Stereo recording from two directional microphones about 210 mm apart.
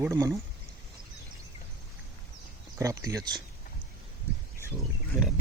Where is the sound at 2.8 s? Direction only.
15° right (ahead or behind).